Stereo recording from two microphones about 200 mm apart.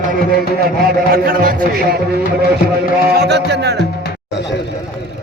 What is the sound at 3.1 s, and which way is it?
Mantra, 55° right (ahead or behind).